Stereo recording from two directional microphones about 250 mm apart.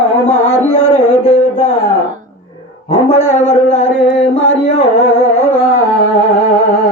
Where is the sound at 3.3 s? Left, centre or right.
Left.